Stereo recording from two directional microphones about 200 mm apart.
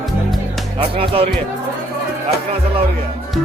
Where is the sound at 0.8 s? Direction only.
30° right (ahead or behind).